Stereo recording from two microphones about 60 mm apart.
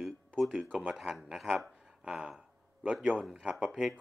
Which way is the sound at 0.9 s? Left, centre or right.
Centre.